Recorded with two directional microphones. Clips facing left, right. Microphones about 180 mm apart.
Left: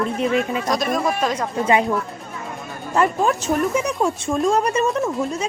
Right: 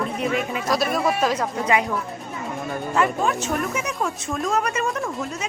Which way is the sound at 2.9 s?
40° left (ahead or behind).